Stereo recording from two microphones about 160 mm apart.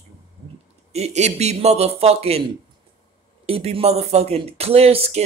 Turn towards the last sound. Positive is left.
turn(degrees=-40)  # may be behind; listen again after turning